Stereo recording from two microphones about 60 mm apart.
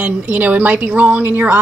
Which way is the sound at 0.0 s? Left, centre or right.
Right.